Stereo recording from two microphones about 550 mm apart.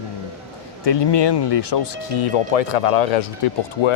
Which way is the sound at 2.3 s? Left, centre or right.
Left.